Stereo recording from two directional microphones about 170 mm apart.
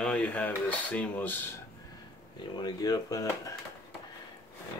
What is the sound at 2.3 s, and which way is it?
Speech, 25° left (ahead or behind).